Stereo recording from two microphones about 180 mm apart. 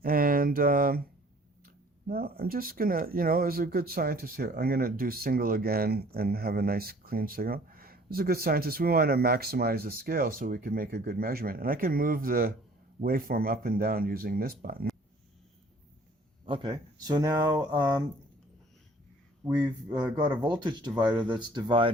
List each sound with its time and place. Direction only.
0.0 s a sound: 55° right (ahead or behind)
2.0 s speech: 55° right (ahead or behind)
16.5 s speech: 25° right (ahead or behind)
20.4 s speech: 25° right (ahead or behind)